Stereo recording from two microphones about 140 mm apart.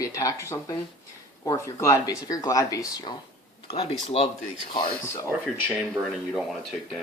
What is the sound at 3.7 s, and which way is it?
Speech, 40° left (ahead or behind).